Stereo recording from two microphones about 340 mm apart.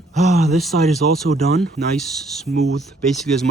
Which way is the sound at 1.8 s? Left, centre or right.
Centre.